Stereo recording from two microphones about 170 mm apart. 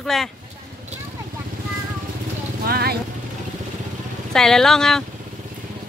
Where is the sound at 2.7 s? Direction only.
65° right (ahead or behind).